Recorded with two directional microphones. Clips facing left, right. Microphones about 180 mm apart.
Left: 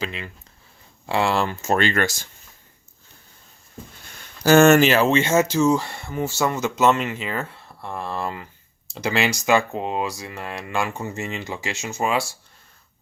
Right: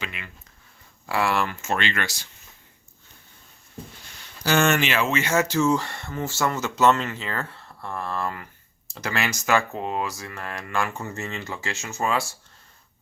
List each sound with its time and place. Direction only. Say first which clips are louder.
0.0 s speech: left 6 dB; 30° left (ahead or behind); by 2.3 s 45° left (ahead or behind)
4.4 s speech: left 8 dB; 45° left (ahead or behind); by 12.2 s 15° left (ahead or behind)